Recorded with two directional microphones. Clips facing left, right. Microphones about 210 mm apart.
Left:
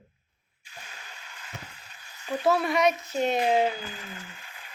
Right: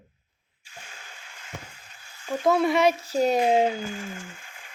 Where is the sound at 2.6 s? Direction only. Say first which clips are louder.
Right 3 dB; 25° right (ahead or behind).